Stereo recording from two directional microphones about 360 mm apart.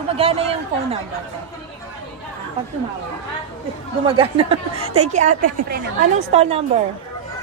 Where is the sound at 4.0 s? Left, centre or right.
Centre.